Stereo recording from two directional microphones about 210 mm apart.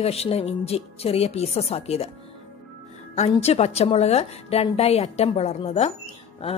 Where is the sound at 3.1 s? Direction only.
30° left (ahead or behind).